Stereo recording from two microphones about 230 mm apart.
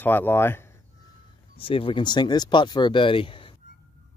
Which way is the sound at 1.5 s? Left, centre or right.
Left.